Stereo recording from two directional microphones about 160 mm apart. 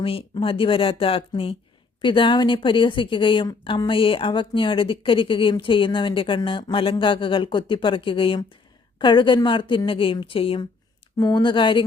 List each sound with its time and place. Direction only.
0.0 s a woman's voice: 35° left (ahead or behind)